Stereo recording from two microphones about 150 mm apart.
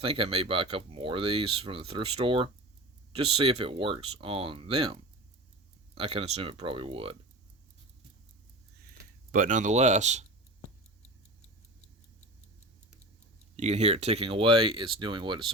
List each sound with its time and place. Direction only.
0.0 s speech: 40° right (ahead or behind)
9.3 s speech: 60° right (ahead or behind)
13.6 s speech: 45° right (ahead or behind)